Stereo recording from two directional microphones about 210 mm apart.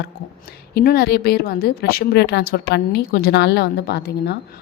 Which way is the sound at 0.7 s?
50° left (ahead or behind).